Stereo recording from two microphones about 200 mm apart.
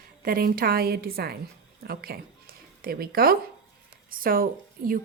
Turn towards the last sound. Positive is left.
turn(degrees=-45)  # may be behind; listen again after turning